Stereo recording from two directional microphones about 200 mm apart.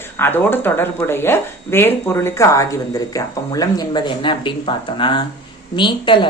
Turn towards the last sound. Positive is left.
turn(degrees=25)  # may be behind; listen again after turning